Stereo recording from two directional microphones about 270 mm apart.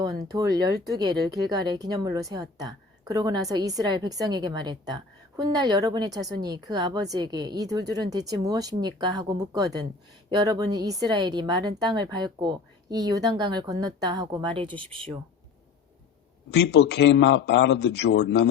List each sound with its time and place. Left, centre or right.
0.3 s a woman's voice: centre
16.5 s a man's voice: left